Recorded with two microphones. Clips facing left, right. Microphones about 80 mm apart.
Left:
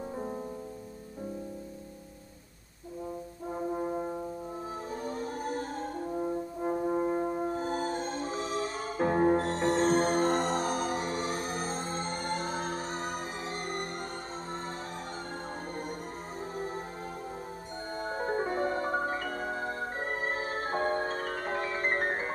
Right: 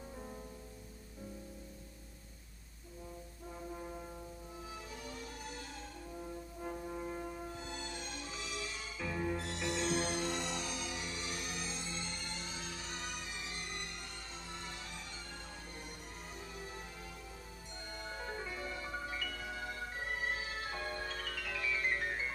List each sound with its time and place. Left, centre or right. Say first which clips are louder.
3.4 s brass instrument: left 13 dB; left
4.9 s french horn: left 12 dB; left
16.5 s music: left 13 dB; left
17.9 s marimba: left 12 dB; left